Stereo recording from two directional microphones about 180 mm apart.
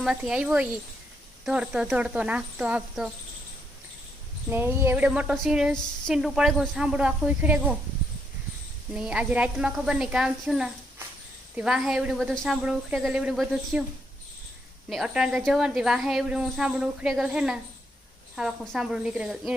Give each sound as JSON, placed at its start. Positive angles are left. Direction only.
{"t": 0.0, "sound": "speech", "side_deg": -5}
{"t": 4.4, "sound": "speech", "side_deg": -10}
{"t": 8.9, "sound": "speech", "side_deg": -5}
{"t": 14.8, "sound": "speech", "side_deg": 0}